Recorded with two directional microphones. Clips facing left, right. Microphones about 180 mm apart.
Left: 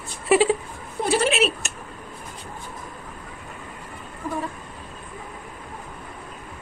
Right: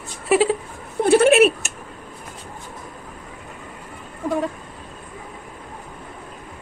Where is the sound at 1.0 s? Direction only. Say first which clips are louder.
Right 8 dB; 55° right (ahead or behind).